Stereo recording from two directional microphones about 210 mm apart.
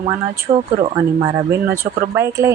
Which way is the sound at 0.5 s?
25° right (ahead or behind).